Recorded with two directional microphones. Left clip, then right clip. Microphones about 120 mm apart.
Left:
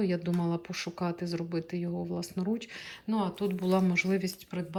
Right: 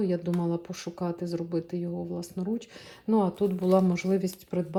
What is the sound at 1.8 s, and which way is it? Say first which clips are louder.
Speech: right 1 dB; 20° right (ahead or behind).